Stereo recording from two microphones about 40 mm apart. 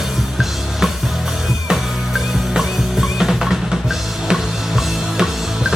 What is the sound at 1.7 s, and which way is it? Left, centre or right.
Drum kit, centre.